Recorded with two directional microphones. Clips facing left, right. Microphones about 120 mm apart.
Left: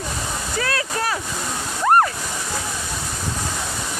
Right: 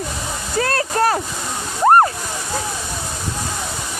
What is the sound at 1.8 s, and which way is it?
Waterfall, 35° right (ahead or behind).